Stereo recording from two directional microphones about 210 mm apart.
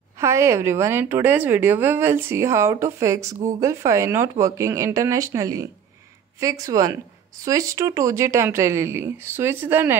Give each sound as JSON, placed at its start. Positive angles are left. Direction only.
{"t": 0.2, "sound": "a woman's voice", "side_deg": -15}